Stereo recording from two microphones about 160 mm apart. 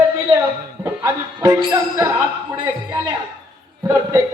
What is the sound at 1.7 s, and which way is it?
Speech, 20° right (ahead or behind).